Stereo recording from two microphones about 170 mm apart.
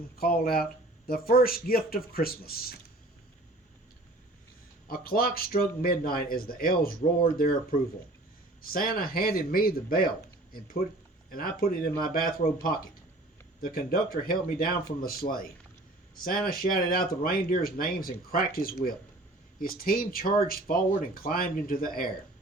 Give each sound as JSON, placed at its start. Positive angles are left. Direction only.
{"t": 0.2, "sound": "speech", "side_deg": 60}
{"t": 4.9, "sound": "speech", "side_deg": 60}
{"t": 11.3, "sound": "speech", "side_deg": 60}